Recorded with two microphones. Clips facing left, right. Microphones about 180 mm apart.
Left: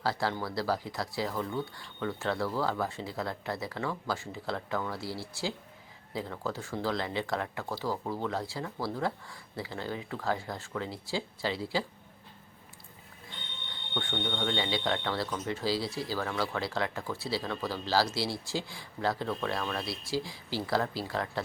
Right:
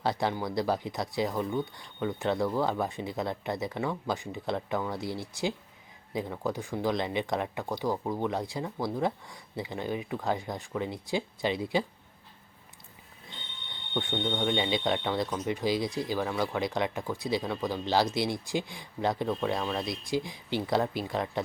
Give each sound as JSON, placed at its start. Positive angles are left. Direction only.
{"t": 0.0, "sound": "speech", "side_deg": -20}
{"t": 13.9, "sound": "speech", "side_deg": -15}